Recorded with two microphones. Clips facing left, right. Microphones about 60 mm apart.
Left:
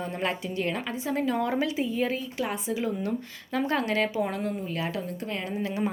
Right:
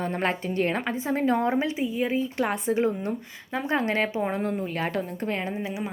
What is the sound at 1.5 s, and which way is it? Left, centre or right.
Speech, right.